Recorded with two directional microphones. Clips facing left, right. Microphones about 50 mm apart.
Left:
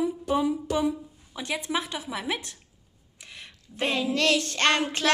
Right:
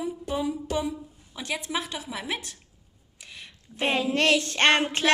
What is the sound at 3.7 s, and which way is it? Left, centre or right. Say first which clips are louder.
Speech: right 1 dB; right.